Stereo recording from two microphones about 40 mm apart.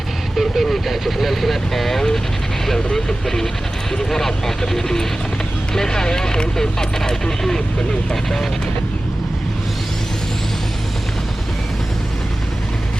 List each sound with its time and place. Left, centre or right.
0.3 s speech: centre